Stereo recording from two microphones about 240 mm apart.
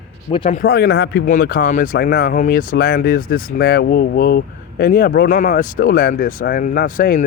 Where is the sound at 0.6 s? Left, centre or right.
Left.